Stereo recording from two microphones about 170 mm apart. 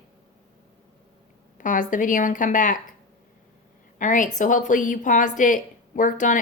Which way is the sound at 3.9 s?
50° left (ahead or behind).